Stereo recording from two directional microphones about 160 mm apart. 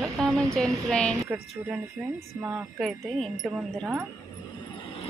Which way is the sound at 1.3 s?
10° right (ahead or behind).